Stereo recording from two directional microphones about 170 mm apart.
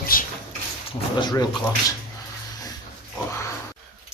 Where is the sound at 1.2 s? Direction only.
25° left (ahead or behind).